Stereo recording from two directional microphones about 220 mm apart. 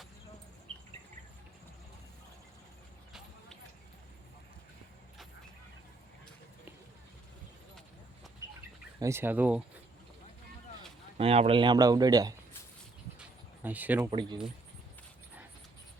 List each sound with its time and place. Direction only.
8.4 s bird: 15° right (ahead or behind)
9.0 s speech: 10° right (ahead or behind)
11.2 s speech: 25° right (ahead or behind)
13.1 s a sound: 5° right (ahead or behind)
14.1 s speech: 20° right (ahead or behind)